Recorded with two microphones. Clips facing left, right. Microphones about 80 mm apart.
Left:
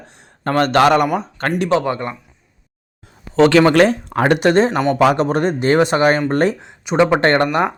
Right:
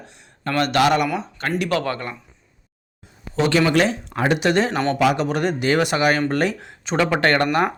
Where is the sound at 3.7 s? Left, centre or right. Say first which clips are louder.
Left 6 dB; left.